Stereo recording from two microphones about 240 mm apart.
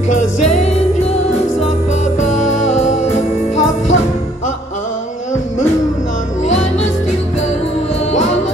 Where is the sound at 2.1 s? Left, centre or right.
Left.